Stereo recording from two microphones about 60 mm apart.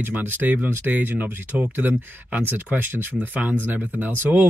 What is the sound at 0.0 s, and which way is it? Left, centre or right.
Speech, right.